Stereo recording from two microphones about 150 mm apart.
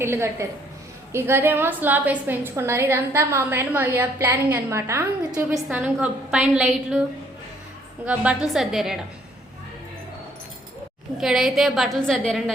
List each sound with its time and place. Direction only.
0.0 s a woman's voice: 15° right (ahead or behind)
5.5 s a woman's voice: 10° right (ahead or behind)
8.0 s a woman's voice: 10° right (ahead or behind)
11.2 s a woman's voice: centre (ahead or behind)